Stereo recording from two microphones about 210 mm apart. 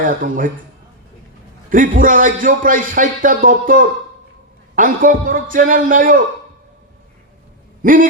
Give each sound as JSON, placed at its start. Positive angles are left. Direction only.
{"t": 0.0, "sound": "speech", "side_deg": -40}
{"t": 1.7, "sound": "speech", "side_deg": -40}
{"t": 7.8, "sound": "a sound", "side_deg": -40}